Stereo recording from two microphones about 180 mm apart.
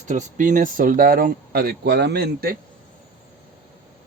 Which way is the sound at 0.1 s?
45° right (ahead or behind).